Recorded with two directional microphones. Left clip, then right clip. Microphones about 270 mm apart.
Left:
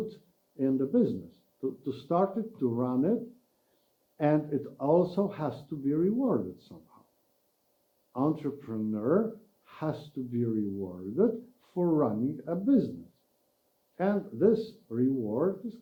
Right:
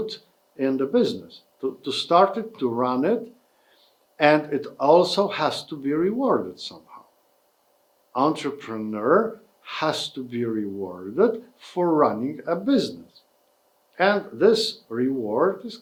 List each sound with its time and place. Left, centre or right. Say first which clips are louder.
0.0 s speech: right 8 dB; centre
6.7 s a sound: right 11 dB; centre
8.1 s speech: right 8 dB; centre
13.9 s speech: right 10 dB; centre